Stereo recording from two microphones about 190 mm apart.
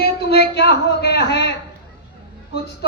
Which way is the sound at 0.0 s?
60° left (ahead or behind).